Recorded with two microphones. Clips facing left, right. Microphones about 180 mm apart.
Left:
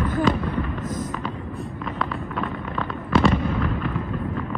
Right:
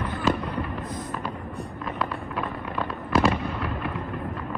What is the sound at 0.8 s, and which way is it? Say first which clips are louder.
Fireworks: left 5 dB; 45° left (ahead or behind).